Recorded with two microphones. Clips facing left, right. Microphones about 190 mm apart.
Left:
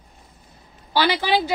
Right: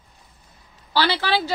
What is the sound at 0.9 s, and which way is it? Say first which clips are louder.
Speech: left 2 dB; 10° left (ahead or behind).